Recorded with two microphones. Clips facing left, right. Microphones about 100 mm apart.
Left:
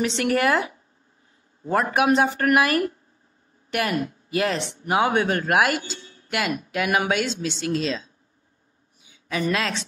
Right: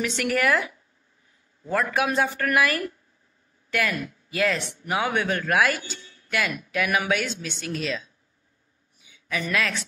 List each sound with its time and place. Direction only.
0.0 s a woman's voice: 30° left (ahead or behind)